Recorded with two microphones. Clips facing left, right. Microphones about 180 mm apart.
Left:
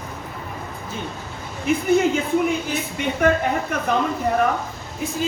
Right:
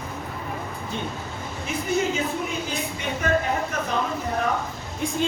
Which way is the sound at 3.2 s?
55° left (ahead or behind).